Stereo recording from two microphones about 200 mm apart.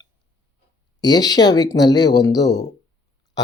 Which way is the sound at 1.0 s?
20° left (ahead or behind).